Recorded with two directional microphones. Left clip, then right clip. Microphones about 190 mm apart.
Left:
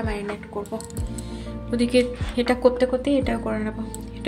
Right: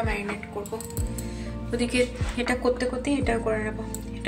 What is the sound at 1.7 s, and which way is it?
A woman's voice, 70° left (ahead or behind).